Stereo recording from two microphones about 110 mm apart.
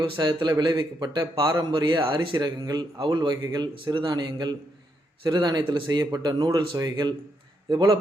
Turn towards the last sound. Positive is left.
turn(degrees=-35)  # may be behind; listen again after turning